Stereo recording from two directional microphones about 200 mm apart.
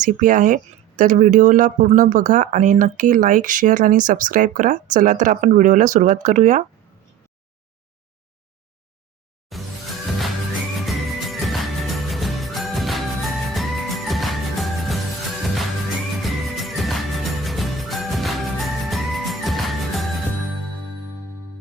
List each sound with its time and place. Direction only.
0.0 s speech: 40° right (ahead or behind)
9.5 s music: centre (ahead or behind)
16.2 s music: centre (ahead or behind)